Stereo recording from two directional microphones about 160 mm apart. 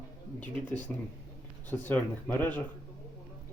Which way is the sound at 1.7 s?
10° left (ahead or behind).